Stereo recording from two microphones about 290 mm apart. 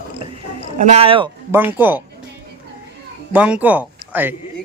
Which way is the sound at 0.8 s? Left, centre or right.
Right.